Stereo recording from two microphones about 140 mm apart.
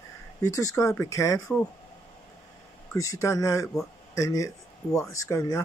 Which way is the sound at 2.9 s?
25° left (ahead or behind).